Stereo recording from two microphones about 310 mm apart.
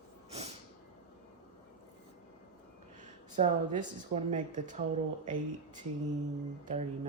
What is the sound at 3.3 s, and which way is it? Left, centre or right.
Speech, right.